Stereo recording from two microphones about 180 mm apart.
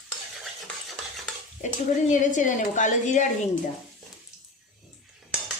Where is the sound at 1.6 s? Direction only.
45° left (ahead or behind).